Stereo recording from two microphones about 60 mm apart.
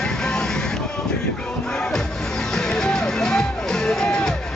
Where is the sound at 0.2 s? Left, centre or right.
Centre.